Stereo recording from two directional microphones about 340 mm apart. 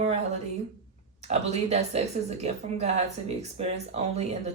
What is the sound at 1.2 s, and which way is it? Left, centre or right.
Speech, centre.